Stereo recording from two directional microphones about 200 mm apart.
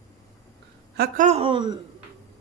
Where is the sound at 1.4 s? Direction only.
25° right (ahead or behind).